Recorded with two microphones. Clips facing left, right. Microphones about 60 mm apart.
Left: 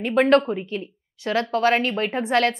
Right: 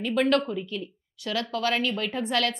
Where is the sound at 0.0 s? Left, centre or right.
Left.